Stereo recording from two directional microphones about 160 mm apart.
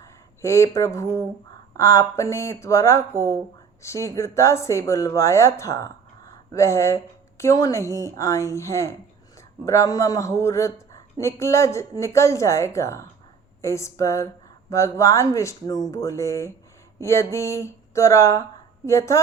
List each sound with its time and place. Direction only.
0.0 s speech: 20° left (ahead or behind)